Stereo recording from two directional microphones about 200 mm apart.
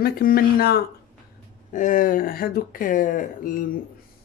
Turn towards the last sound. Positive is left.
turn(degrees=40)  # may be behind; listen again after turning